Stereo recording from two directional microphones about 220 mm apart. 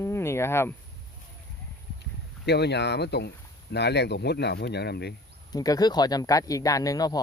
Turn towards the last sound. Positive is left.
turn(degrees=15)  # may be behind; listen again after turning